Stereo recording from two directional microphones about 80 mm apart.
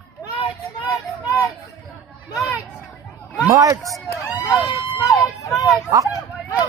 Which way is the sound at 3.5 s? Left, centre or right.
Right.